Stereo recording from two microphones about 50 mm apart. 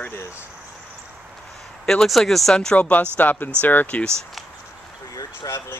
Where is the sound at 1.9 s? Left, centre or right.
Centre.